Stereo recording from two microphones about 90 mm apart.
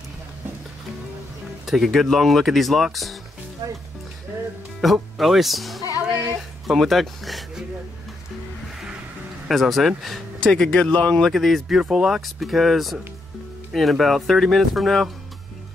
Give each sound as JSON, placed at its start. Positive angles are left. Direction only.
{"t": 1.7, "sound": "speech", "side_deg": 0}
{"t": 3.6, "sound": "speech", "side_deg": -35}
{"t": 4.8, "sound": "speech", "side_deg": 0}
{"t": 9.5, "sound": "speech", "side_deg": 0}